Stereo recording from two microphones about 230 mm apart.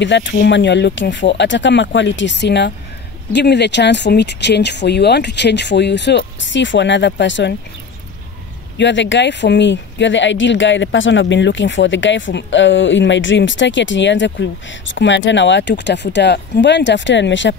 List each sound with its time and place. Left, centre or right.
0.0 s speech: left
8.7 s speech: left